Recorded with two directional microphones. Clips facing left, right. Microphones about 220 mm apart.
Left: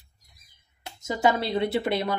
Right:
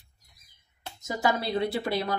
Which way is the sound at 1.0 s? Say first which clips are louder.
Left 3 dB; 25° left (ahead or behind).